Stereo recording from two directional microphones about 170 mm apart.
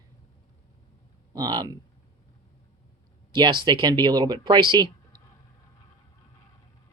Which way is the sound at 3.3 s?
30° right (ahead or behind).